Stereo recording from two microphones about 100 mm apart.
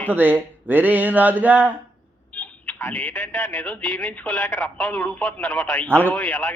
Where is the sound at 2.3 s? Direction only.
15° left (ahead or behind).